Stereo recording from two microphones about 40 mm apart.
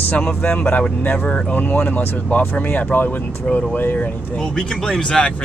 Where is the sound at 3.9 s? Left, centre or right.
Left.